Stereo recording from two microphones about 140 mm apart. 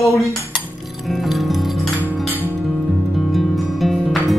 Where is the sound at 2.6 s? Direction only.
Centre (ahead or behind).